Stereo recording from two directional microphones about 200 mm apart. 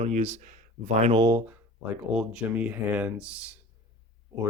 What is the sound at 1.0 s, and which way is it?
Speech, 20° right (ahead or behind).